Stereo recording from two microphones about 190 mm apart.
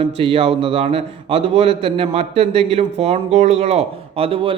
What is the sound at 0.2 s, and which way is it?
A man's voice, 30° right (ahead or behind).